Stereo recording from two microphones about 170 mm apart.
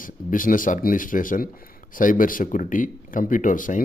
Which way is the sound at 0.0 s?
55° left (ahead or behind).